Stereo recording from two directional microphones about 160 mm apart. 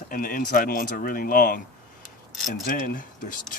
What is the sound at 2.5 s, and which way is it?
Speech, 60° left (ahead or behind).